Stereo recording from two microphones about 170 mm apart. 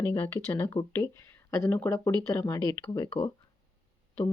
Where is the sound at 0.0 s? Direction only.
10° left (ahead or behind).